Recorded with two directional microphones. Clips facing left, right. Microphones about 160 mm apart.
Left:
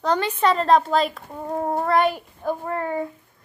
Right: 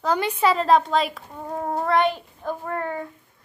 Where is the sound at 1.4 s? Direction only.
15° left (ahead or behind).